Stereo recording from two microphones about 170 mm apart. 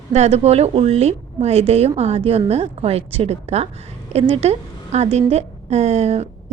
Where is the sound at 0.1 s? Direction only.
40° right (ahead or behind).